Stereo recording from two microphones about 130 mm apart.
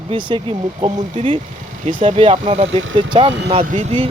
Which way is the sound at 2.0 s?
45° right (ahead or behind).